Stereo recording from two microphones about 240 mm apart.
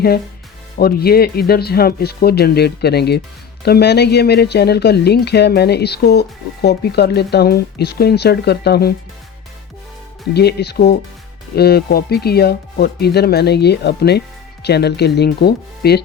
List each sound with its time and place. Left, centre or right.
0.8 s speech: left
10.3 s speech: left